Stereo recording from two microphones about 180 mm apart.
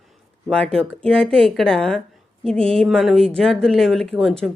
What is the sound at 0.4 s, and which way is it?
Speech, 5° left (ahead or behind).